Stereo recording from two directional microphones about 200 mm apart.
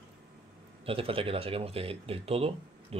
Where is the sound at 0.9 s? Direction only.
25° right (ahead or behind).